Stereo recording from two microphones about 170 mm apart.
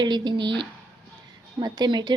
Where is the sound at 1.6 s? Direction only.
25° right (ahead or behind).